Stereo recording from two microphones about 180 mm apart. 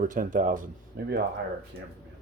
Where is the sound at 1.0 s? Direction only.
60° right (ahead or behind).